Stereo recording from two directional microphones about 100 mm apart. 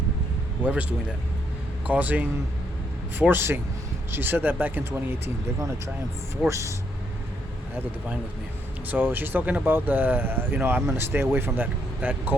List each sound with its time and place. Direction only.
0.6 s speech: 15° right (ahead or behind)
6.5 s speech: 30° right (ahead or behind)
8.9 s speech: 20° right (ahead or behind)